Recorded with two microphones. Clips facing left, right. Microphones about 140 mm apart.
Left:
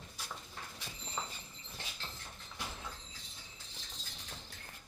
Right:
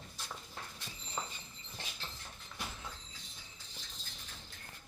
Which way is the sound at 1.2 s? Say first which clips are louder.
Right 1 dB; 5° right (ahead or behind).